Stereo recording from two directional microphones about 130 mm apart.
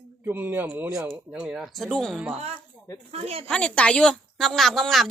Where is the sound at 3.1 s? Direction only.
50° right (ahead or behind).